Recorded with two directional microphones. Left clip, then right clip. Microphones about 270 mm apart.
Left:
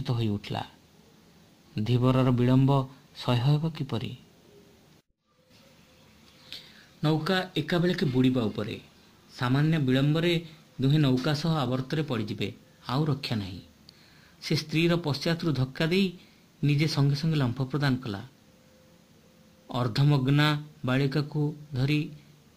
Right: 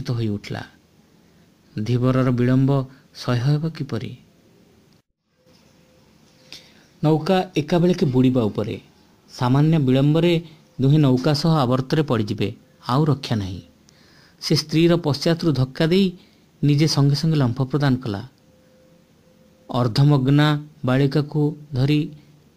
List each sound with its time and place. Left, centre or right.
0.0 s a man's voice: centre
1.8 s a man's voice: centre
6.5 s a man's voice: centre
19.7 s a man's voice: centre